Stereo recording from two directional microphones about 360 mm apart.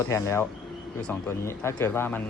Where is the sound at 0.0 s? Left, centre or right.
Centre.